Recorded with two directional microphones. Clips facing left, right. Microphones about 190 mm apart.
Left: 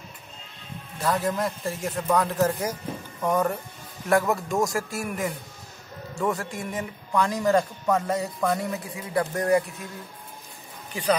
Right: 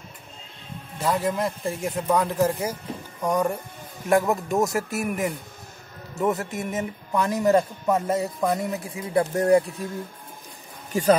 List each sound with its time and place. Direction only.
1.0 s a man's voice: 10° right (ahead or behind); by 9.7 s 30° right (ahead or behind)
10.9 s speech: 45° right (ahead or behind)